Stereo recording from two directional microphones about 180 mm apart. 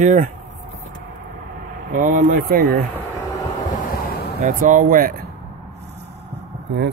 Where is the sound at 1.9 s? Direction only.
45° right (ahead or behind).